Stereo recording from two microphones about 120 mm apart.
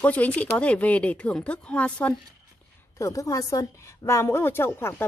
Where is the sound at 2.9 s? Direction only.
25° left (ahead or behind).